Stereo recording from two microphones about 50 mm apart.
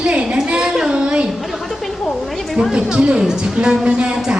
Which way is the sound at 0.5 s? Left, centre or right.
Centre.